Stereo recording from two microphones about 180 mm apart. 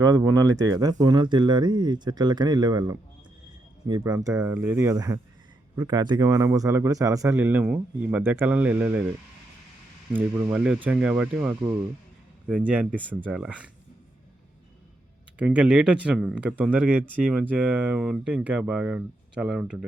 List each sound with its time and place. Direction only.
0.0 s speech: 20° right (ahead or behind)
10.1 s speech: 10° right (ahead or behind)
15.4 s speech: 5° right (ahead or behind)